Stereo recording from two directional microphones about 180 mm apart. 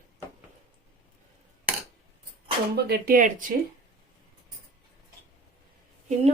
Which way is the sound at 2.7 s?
60° right (ahead or behind).